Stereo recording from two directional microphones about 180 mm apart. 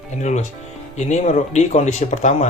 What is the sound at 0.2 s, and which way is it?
Speech, 40° left (ahead or behind).